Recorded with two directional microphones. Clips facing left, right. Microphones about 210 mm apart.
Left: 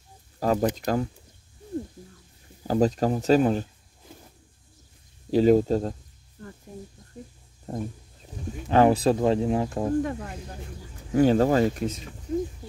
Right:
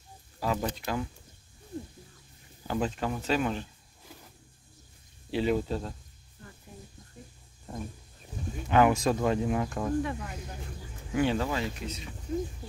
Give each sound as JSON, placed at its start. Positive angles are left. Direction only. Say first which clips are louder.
{"t": 0.4, "sound": "speech", "louder": "left 7 dB", "side_deg": 45}
{"t": 2.6, "sound": "speech", "louder": "left 8 dB", "side_deg": 40}
{"t": 5.3, "sound": "speech", "louder": "left 9 dB", "side_deg": 40}
{"t": 7.2, "sound": "a sound", "louder": "left 8 dB", "side_deg": 40}
{"t": 7.7, "sound": "speech", "louder": "left 7 dB", "side_deg": 35}
{"t": 10.0, "sound": "speech", "louder": "left 4 dB", "side_deg": 40}